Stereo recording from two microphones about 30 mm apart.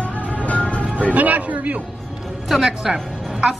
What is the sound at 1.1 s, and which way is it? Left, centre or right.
Speech, right.